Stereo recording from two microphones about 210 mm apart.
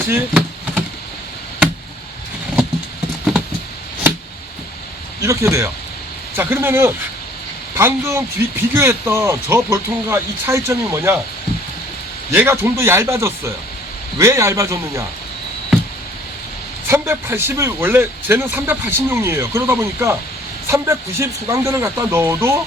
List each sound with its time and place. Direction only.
0.1 s a sound: 5° right (ahead or behind)
5.2 s speech: 15° right (ahead or behind)
12.3 s speech: 10° right (ahead or behind)
16.9 s speech: 10° right (ahead or behind)